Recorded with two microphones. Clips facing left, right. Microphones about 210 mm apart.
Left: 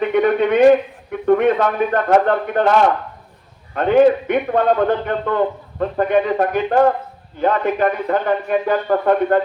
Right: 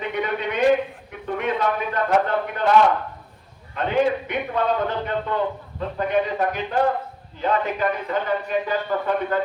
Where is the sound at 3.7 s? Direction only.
50° left (ahead or behind).